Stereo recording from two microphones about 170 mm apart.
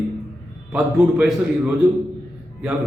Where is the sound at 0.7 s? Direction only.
5° right (ahead or behind).